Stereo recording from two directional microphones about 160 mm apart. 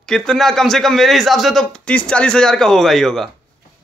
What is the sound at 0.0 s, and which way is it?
A man's voice, 5° left (ahead or behind).